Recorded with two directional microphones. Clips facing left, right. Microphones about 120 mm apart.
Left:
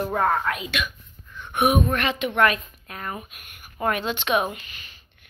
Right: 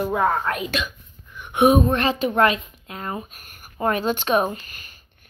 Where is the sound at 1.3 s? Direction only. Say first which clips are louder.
Right 5 dB; 15° right (ahead or behind).